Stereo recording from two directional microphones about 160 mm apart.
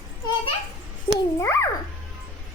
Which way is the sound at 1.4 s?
15° left (ahead or behind).